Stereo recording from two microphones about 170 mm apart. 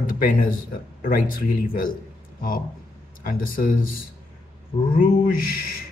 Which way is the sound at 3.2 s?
55° left (ahead or behind).